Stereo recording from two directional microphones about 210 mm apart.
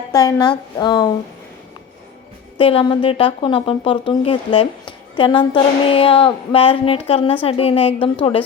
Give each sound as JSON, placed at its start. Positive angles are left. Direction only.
{"t": 0.1, "sound": "speech", "side_deg": 15}
{"t": 2.6, "sound": "speech", "side_deg": 25}